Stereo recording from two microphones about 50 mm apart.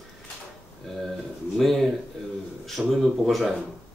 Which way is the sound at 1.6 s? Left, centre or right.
Centre.